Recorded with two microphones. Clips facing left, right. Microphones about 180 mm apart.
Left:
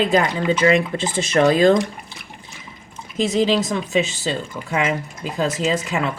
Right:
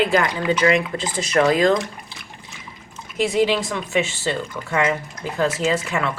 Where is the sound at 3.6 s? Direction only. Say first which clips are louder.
Left 2 dB; 20° left (ahead or behind).